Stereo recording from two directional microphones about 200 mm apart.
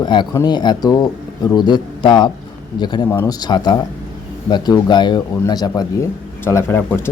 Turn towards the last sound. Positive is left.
turn(degrees=10)  # may be behind; listen again after turning